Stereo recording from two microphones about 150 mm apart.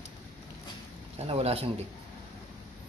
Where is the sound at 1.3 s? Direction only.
40° right (ahead or behind).